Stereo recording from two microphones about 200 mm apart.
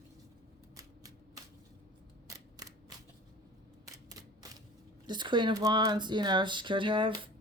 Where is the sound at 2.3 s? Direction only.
15° right (ahead or behind).